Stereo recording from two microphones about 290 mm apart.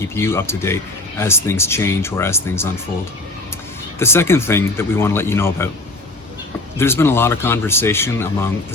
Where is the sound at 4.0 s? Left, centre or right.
Centre.